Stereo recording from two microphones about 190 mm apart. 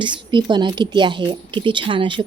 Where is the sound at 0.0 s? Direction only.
25° right (ahead or behind).